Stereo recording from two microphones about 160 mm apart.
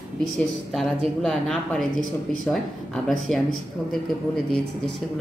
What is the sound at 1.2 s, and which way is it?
Speech, centre (ahead or behind).